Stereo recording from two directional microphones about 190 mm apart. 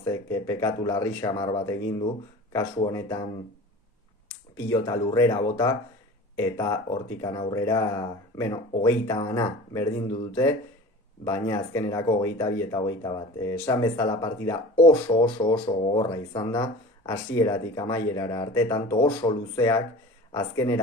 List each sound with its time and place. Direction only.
0.0 s speech: 15° left (ahead or behind)
4.5 s speech: 15° left (ahead or behind)
11.3 s speech: 20° left (ahead or behind)